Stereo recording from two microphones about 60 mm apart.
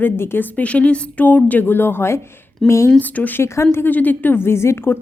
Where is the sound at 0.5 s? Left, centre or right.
Left.